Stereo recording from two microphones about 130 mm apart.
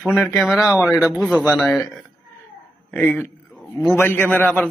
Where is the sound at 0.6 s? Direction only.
5° right (ahead or behind).